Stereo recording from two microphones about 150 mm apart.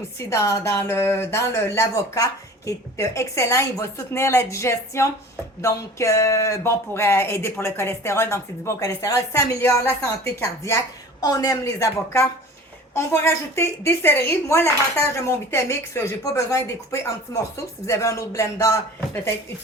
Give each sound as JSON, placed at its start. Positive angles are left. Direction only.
{"t": 0.2, "sound": "a woman's voice", "side_deg": 20}